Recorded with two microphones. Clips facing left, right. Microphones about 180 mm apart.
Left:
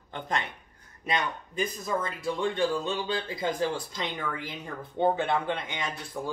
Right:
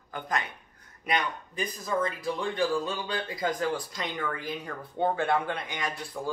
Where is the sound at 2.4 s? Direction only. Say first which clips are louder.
Left 1 dB; 25° left (ahead or behind).